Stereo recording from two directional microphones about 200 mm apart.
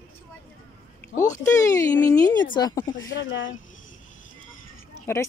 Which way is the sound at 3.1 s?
65° left (ahead or behind).